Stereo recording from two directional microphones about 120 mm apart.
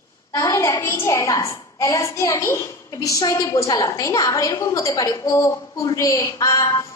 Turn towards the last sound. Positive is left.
turn(degrees=25)  # may be behind; listen again after turning